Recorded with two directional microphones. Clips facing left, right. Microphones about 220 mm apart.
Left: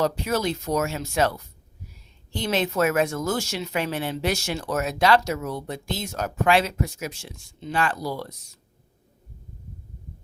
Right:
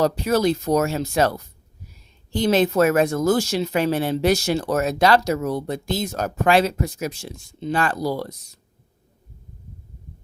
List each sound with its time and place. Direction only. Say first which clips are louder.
0.0 s speech: right 5 dB; 35° right (ahead or behind)